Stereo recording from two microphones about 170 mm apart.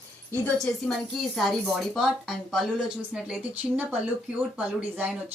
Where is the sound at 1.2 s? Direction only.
Centre (ahead or behind).